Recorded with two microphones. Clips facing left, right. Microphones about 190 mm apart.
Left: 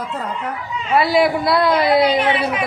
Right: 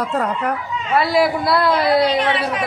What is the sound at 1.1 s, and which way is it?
A man's voice, centre (ahead or behind).